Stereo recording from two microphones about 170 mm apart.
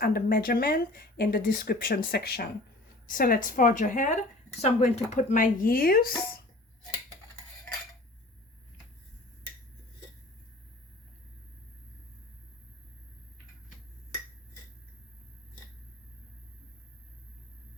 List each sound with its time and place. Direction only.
0.0 s speech: 60° left (ahead or behind)
3.1 s speech: 55° left (ahead or behind)